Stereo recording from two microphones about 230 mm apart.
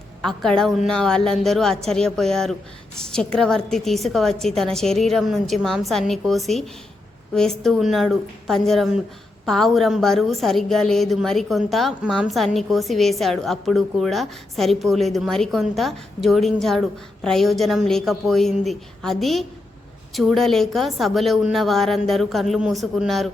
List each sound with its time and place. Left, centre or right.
0.2 s a woman's voice: centre